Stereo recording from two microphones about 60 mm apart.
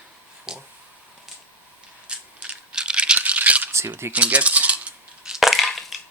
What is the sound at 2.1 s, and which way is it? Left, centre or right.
Rattle, centre.